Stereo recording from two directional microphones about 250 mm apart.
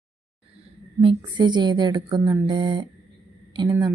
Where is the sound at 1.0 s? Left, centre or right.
Centre.